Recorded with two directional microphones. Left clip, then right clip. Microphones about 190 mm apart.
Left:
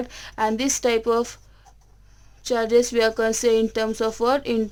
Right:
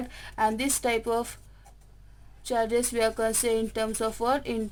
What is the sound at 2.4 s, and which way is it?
Speech, 35° left (ahead or behind).